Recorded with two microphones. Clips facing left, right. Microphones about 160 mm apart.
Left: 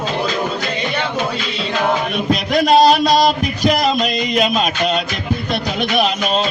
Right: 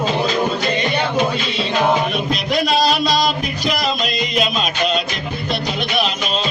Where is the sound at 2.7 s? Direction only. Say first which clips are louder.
Left 8 dB; 50° left (ahead or behind).